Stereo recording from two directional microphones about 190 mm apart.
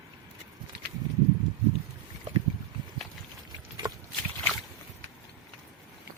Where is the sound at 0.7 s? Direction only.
60° right (ahead or behind).